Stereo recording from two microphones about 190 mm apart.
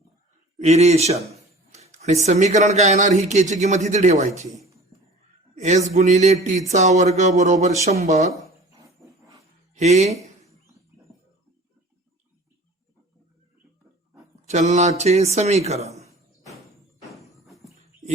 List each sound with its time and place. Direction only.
0.6 s a sound: 35° right (ahead or behind)
2.2 s a man's voice: 35° right (ahead or behind)
9.7 s a man's voice: 35° right (ahead or behind)
14.4 s a man's voice: 35° right (ahead or behind)
17.1 s music: centre (ahead or behind)